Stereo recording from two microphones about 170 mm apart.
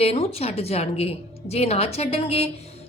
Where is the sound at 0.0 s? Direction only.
35° left (ahead or behind).